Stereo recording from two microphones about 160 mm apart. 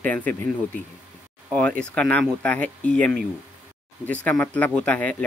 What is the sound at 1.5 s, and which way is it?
Speech, 5° left (ahead or behind).